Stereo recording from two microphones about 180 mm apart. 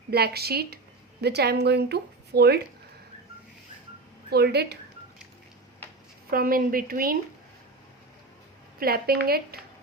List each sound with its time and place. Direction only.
0.1 s speech: 60° right (ahead or behind)
4.3 s speech: 65° right (ahead or behind)
6.3 s speech: 55° right (ahead or behind)
8.8 s speech: 55° right (ahead or behind)